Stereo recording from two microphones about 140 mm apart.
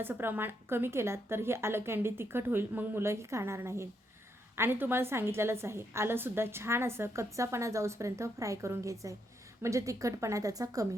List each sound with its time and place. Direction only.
0.0 s a woman's voice: 15° right (ahead or behind)